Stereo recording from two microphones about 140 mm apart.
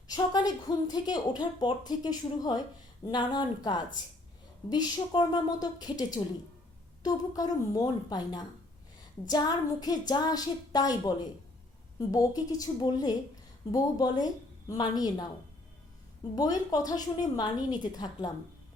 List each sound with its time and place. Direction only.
0.1 s a woman's voice: 30° left (ahead or behind)
16.3 s a woman's voice: 30° left (ahead or behind)